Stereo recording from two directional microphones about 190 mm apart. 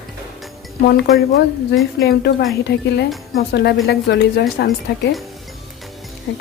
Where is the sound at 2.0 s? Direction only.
55° left (ahead or behind).